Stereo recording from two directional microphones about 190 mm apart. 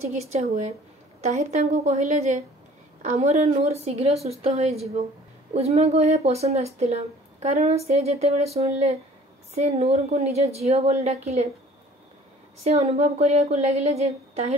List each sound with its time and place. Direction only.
0.0 s speech: 35° right (ahead or behind)
12.6 s speech: 35° right (ahead or behind)